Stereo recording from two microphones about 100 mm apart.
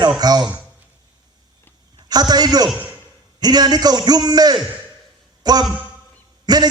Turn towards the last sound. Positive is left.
turn(degrees=-45)  # may be behind; listen again after turning